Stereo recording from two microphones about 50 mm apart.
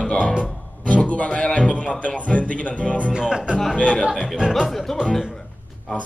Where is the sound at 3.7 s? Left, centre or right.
Left.